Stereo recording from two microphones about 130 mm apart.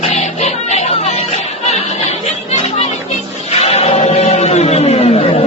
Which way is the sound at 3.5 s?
50° left (ahead or behind).